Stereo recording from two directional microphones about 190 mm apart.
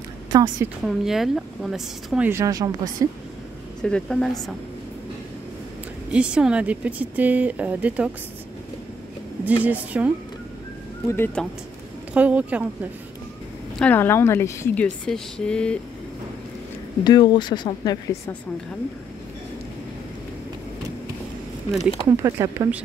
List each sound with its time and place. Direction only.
0.3 s a woman's voice: 20° right (ahead or behind)
0.8 s a woman's voice: centre (ahead or behind); by 2.7 s 20° right (ahead or behind)
3.8 s a woman's voice: 5° left (ahead or behind)
6.1 s speech: 5° right (ahead or behind)
9.4 s speech: 10° right (ahead or behind)
11.1 s a woman's voice: 10° left (ahead or behind)
12.1 s speech: 5° right (ahead or behind)
13.7 s a woman's voice: 10° left (ahead or behind)
15.0 s a woman's voice: 5° left (ahead or behind)
17.0 s speech: 25° left (ahead or behind)
22.0 s speech: 15° right (ahead or behind)